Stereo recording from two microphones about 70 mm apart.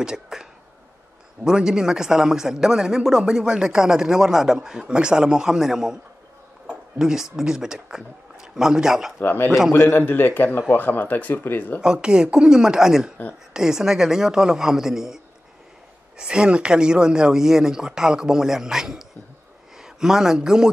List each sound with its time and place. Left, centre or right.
0.0 s a sound: centre
1.4 s a man's voice: centre
7.0 s a man's voice: centre
9.2 s a man's voice: left
11.8 s a man's voice: centre